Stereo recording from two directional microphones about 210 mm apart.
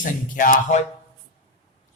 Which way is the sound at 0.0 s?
40° left (ahead or behind).